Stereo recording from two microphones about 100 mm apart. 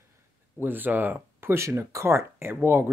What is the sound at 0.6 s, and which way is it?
A man's voice, 20° right (ahead or behind).